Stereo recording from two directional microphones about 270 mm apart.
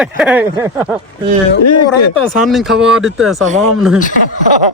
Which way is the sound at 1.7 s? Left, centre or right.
Left.